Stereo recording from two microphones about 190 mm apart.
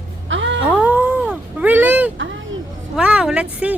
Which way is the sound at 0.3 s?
80° right.